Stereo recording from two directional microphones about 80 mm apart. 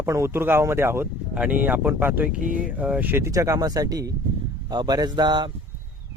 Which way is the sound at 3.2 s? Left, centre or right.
Right.